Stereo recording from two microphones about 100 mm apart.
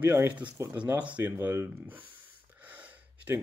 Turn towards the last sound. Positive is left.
turn(degrees=-15)  # may be behind; listen again after turning